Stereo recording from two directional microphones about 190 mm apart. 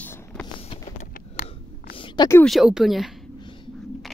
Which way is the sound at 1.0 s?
50° left (ahead or behind).